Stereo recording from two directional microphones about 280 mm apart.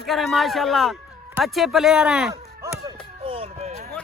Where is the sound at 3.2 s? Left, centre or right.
Centre.